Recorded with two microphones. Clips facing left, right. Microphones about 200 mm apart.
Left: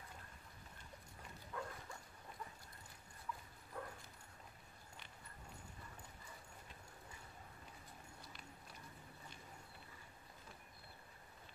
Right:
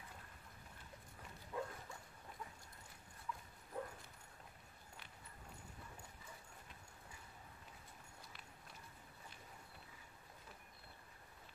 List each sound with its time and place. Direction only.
1.5 s dog: 20° right (ahead or behind)
3.3 s dog: centre (ahead or behind)
3.8 s dog: 20° right (ahead or behind)